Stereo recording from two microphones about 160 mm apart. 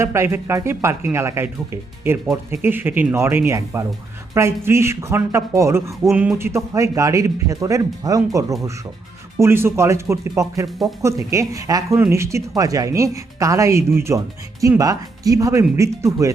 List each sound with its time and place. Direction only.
0.0 s speech: 15° right (ahead or behind)
6.1 s speech: 5° right (ahead or behind)
6.3 s speech: 15° right (ahead or behind)